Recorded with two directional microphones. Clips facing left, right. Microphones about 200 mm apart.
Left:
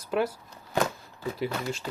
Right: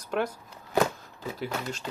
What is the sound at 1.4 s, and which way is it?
Speech, 10° left (ahead or behind).